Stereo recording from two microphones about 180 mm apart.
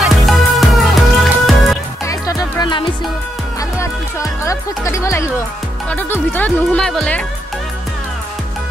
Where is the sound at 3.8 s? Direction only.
15° left (ahead or behind).